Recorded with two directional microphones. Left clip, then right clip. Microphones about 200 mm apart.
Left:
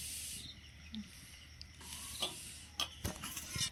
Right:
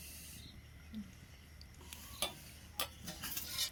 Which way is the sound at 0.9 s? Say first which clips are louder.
Left 2 dB; 50° right (ahead or behind).